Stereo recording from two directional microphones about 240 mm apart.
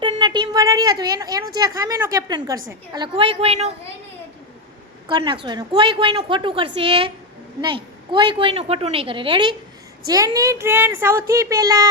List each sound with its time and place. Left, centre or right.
0.0 s a woman's voice: centre
5.0 s a woman's voice: centre